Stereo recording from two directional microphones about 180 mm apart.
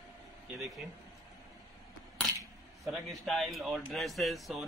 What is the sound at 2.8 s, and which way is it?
Speech, centre (ahead or behind).